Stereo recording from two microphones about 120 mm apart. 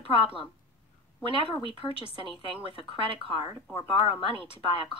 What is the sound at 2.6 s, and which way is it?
Speech, 50° left (ahead or behind).